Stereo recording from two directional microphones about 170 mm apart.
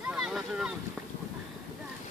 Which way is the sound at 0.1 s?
5° right (ahead or behind).